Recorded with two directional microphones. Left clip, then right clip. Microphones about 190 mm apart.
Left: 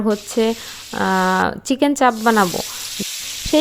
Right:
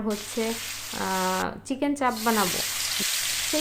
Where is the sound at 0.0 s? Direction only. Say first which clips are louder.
Left 11 dB; 45° left (ahead or behind).